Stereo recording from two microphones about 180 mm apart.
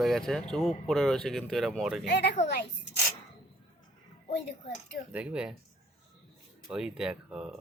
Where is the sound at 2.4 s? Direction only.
40° left (ahead or behind).